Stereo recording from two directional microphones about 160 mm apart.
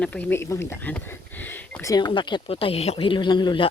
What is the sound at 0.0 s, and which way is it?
Speech, 10° left (ahead or behind).